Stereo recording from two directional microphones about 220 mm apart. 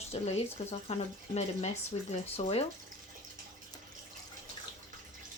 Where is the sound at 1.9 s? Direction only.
25° left (ahead or behind).